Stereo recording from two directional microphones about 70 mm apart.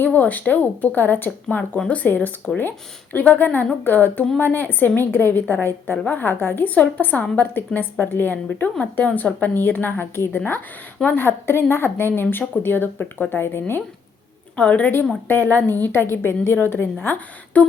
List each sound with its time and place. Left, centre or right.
0.0 s a woman's voice: left
14.5 s a woman's voice: centre